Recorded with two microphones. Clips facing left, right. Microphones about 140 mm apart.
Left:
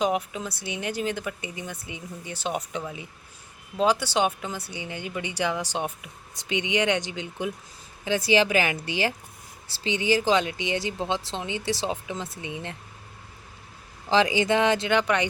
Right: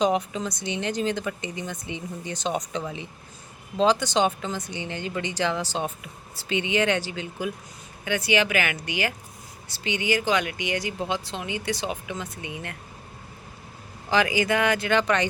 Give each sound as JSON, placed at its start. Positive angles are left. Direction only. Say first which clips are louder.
{"t": 0.0, "sound": "speech", "louder": "right 2 dB", "side_deg": 5}
{"t": 14.1, "sound": "speech", "louder": "left 1 dB", "side_deg": 25}
{"t": 14.9, "sound": "speech", "louder": "right 1 dB", "side_deg": 15}